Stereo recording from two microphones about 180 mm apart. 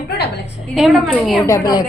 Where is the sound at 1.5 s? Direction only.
25° left (ahead or behind).